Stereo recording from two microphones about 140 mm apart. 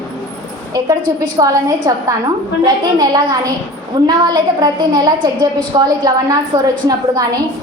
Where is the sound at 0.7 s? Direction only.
30° right (ahead or behind).